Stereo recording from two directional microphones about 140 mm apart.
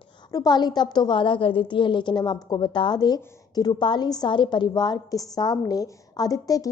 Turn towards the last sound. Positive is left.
turn(degrees=25)  # may be behind; listen again after turning